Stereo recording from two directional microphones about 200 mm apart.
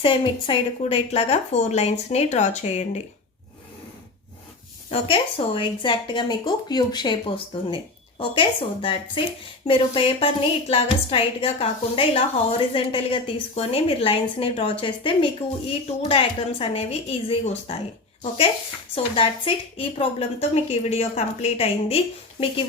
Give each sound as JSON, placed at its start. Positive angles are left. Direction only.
{"t": 0.0, "sound": "a woman's voice", "side_deg": 25}
{"t": 4.9, "sound": "a woman's voice", "side_deg": 30}
{"t": 19.1, "sound": "a woman's voice", "side_deg": 25}